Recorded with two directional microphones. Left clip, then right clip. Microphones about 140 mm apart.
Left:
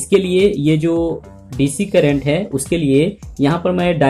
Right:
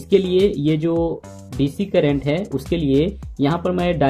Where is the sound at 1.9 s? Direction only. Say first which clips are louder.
Left 4 dB; 30° right (ahead or behind).